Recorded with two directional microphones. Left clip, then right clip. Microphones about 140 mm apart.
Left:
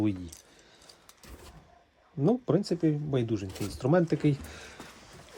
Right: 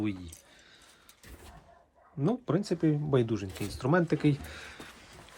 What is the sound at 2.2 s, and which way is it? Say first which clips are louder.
Speech: left 4 dB; 20° left (ahead or behind).